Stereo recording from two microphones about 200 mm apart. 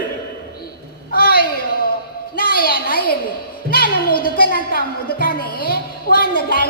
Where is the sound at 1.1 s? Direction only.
50° left (ahead or behind).